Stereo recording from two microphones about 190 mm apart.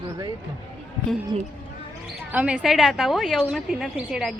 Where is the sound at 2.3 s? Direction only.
5° right (ahead or behind).